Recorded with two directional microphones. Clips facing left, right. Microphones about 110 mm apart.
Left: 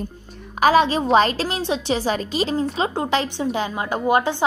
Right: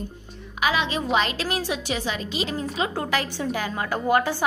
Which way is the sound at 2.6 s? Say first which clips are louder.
Left 4 dB; 25° left (ahead or behind).